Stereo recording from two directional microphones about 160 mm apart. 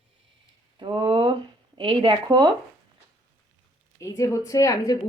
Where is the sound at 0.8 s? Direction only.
30° right (ahead or behind).